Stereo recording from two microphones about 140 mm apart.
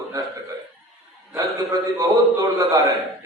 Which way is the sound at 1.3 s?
25° right (ahead or behind).